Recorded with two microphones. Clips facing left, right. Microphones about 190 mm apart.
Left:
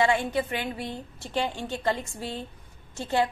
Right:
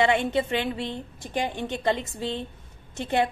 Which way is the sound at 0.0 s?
20° right (ahead or behind).